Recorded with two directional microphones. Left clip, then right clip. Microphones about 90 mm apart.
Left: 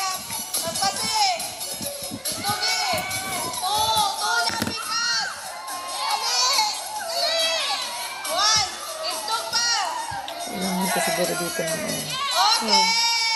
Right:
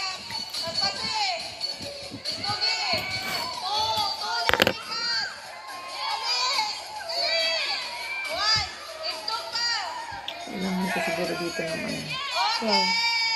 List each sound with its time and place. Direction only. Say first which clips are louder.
0.6 s music: left 3 dB; 45° left (ahead or behind)
2.4 s run: left 3 dB; 45° left (ahead or behind)
4.9 s a sound: left 4 dB; 50° left (ahead or behind)
8.3 s music: left 5 dB; 50° left (ahead or behind)